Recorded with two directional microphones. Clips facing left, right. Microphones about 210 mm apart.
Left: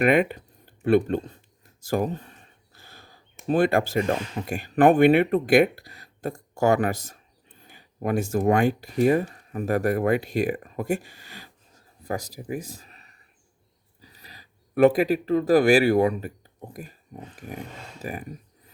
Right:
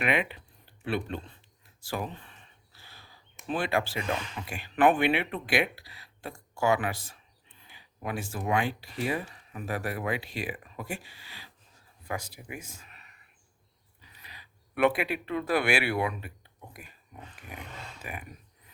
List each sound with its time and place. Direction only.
0.0 s speech: 45° left (ahead or behind)